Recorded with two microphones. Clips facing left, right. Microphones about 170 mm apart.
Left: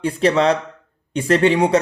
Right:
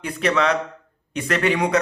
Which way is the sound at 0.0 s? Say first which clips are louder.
Left 5 dB; 30° left (ahead or behind).